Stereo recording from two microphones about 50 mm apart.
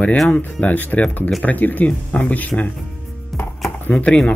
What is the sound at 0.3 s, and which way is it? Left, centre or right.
Speech, left.